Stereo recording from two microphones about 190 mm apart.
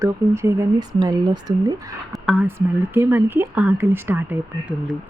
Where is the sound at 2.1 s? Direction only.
Centre (ahead or behind).